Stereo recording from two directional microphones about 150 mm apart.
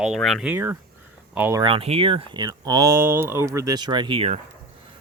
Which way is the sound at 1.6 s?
35° right (ahead or behind).